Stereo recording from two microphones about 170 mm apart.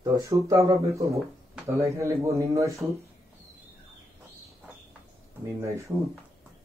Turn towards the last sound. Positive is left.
turn(degrees=-15)  # may be behind; listen again after turning